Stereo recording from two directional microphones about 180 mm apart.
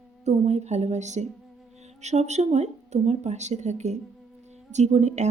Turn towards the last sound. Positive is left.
turn(degrees=-40)  # may be behind; listen again after turning